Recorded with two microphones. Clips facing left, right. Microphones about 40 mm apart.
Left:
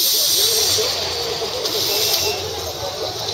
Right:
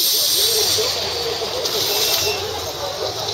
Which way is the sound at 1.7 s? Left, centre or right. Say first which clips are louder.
Right 1 dB; centre.